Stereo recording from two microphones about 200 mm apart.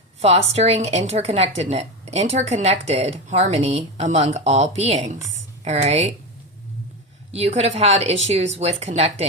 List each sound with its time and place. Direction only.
0.2 s a woman's voice: 30° right (ahead or behind)
7.3 s a woman's voice: 30° right (ahead or behind)